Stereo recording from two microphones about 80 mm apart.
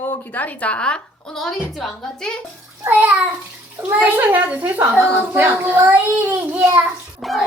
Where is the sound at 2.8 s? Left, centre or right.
Right.